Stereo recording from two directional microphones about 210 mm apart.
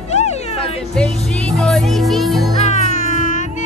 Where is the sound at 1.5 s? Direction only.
5° left (ahead or behind).